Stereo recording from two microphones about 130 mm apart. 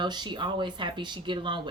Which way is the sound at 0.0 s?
35° right (ahead or behind).